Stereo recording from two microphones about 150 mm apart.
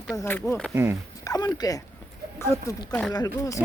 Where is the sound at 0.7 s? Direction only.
15° right (ahead or behind).